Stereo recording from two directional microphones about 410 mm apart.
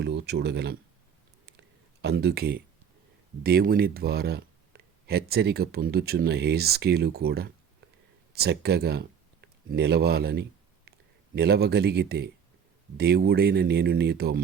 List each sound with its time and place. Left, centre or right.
0.0 s speech: right
1.5 s a sound: right
3.4 s speech: right